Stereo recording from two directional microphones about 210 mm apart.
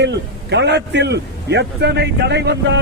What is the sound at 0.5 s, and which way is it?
A man's voice, 55° right (ahead or behind).